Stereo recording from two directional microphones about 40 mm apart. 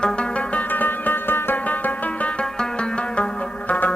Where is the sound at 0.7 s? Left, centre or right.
Left.